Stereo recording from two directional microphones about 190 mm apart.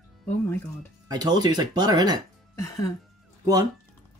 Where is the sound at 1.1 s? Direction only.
20° right (ahead or behind).